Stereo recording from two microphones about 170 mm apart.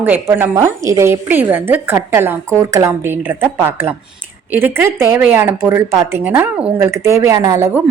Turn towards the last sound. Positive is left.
turn(degrees=-15)  # may be behind; listen again after turning